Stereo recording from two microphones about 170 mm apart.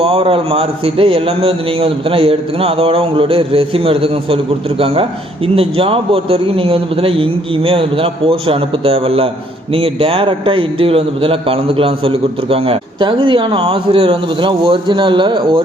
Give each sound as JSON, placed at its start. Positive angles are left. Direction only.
{"t": 0.0, "sound": "a man's voice", "side_deg": -35}
{"t": 5.5, "sound": "a man's voice", "side_deg": -35}